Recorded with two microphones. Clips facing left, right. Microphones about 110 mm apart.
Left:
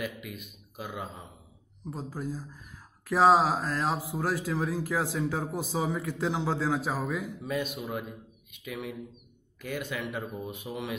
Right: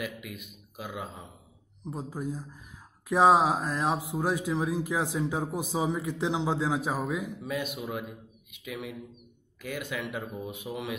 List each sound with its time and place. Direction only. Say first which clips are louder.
0.0 s speech: left 1 dB; 10° right (ahead or behind)
1.8 s speech: right 1 dB; 20° right (ahead or behind)